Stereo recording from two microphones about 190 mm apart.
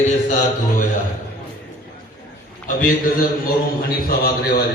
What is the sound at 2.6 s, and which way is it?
A man's voice, 45° left (ahead or behind).